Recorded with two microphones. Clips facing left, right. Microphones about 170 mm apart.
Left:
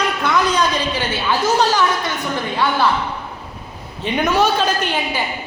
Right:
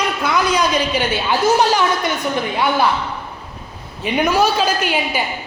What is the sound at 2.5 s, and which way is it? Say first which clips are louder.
Speech: even; 15° right (ahead or behind).